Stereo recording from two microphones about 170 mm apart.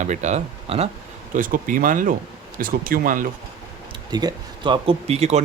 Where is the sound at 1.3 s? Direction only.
55° right (ahead or behind).